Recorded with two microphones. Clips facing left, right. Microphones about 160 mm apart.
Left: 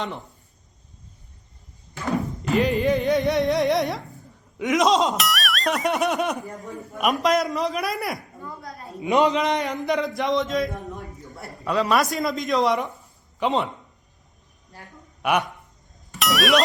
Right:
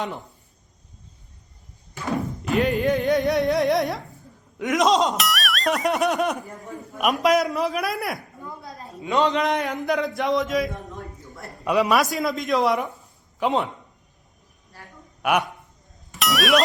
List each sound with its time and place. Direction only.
2.4 s music: centre (ahead or behind)
4.5 s a sound: centre (ahead or behind)
7.0 s speech: centre (ahead or behind)
9.0 s a man's voice: 20° left (ahead or behind)
9.3 s speech: centre (ahead or behind)
11.6 s a man's voice: 15° right (ahead or behind)
11.9 s speech: centre (ahead or behind)
14.7 s speech: 20° left (ahead or behind)
15.2 s speech: centre (ahead or behind)
16.1 s music: centre (ahead or behind)